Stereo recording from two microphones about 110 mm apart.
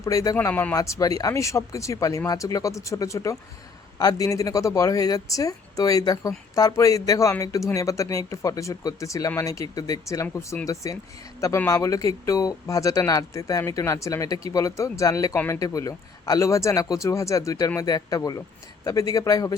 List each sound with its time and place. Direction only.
0.0 s speech: 30° left (ahead or behind)
0.3 s a man's voice: 15° left (ahead or behind)
0.8 s speech: 30° left (ahead or behind)